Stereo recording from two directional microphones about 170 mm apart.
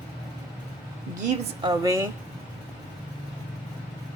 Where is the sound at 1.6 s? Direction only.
20° right (ahead or behind).